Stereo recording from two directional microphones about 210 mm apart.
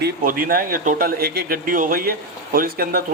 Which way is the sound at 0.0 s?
40° right (ahead or behind).